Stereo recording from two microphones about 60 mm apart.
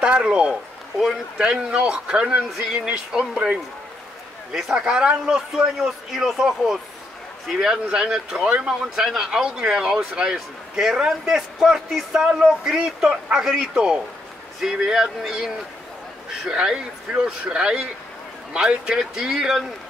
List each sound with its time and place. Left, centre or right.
0.0 s speech: centre
0.9 s speech: centre
1.4 s speech: centre
2.5 s speech: centre